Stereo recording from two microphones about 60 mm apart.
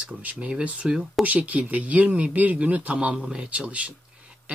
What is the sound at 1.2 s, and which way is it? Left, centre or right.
Speech, right.